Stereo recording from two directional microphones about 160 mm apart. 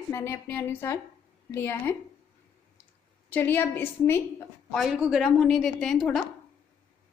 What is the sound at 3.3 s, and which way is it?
Speech, 10° left (ahead or behind).